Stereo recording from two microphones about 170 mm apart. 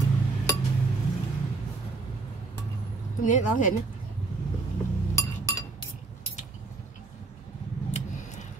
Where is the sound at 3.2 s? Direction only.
50° left (ahead or behind).